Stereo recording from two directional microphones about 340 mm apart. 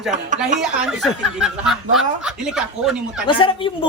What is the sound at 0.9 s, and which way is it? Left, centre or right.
Speech, centre.